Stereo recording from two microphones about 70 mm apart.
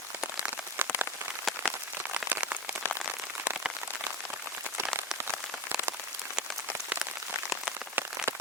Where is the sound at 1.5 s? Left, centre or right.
Centre.